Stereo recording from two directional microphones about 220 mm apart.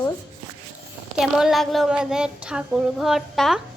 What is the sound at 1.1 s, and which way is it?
Speech, centre (ahead or behind).